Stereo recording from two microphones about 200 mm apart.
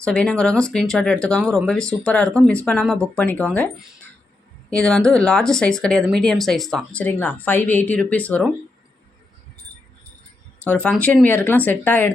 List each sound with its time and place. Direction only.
0.0 s speech: 5° left (ahead or behind)
10.6 s speech: 5° left (ahead or behind)